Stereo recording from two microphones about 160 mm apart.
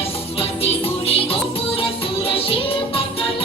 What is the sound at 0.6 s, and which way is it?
Music, 35° left (ahead or behind).